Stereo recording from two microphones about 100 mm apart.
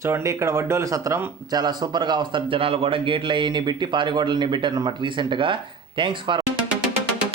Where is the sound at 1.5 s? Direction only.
45° right (ahead or behind).